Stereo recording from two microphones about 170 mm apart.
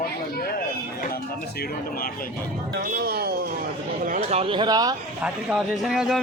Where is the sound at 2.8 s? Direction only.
60° right (ahead or behind).